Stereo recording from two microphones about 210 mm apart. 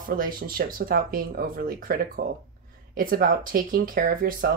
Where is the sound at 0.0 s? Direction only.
40° right (ahead or behind).